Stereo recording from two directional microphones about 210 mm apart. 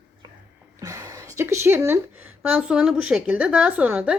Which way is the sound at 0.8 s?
15° right (ahead or behind).